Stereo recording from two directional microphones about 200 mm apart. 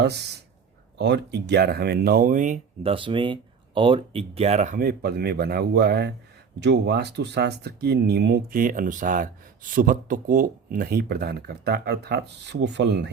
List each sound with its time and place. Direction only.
0.0 s speech: 55° right (ahead or behind); by 2.9 s 40° right (ahead or behind)
2.9 s speech: 25° right (ahead or behind); by 13.1 s 60° right (ahead or behind)